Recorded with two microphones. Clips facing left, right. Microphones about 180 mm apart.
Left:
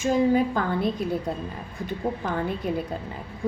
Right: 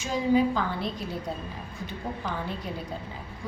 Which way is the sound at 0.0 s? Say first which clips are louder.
Left 3 dB; 50° left (ahead or behind).